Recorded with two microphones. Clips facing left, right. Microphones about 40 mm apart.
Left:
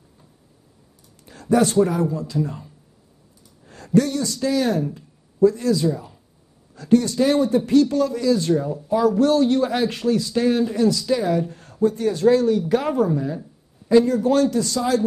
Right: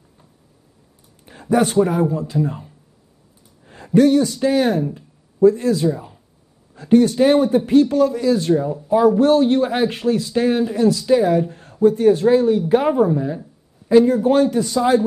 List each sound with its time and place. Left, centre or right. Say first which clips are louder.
1.2 s speech: right 1 dB; right
8.5 s speech: right 3 dB; centre
9.1 s speech: right 3 dB; right